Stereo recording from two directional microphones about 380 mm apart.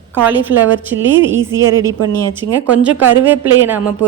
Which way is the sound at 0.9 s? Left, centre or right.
Right.